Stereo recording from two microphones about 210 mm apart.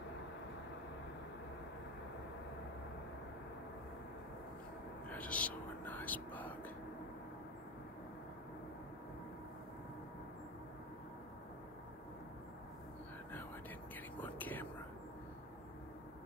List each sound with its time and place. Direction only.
5.1 s whispering: 5° left (ahead or behind)
14.2 s whispering: 10° left (ahead or behind)